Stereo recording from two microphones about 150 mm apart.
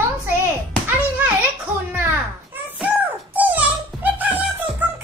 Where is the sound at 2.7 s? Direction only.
10° right (ahead or behind).